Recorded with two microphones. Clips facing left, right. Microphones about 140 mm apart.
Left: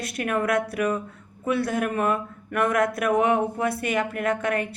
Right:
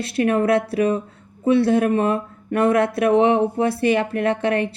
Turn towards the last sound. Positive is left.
turn(degrees=-30)  # may be behind; listen again after turning